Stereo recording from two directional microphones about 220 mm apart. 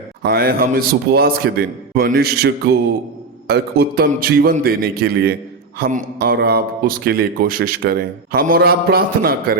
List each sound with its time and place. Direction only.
0.2 s a man's voice: 45° right (ahead or behind)